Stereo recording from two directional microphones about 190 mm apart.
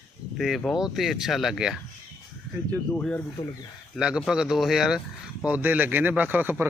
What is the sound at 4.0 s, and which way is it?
Speech, 5° right (ahead or behind).